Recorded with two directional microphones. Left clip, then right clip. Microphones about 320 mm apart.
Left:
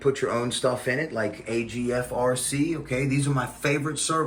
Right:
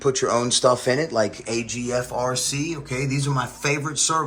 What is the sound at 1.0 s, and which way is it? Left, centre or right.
Speech, right.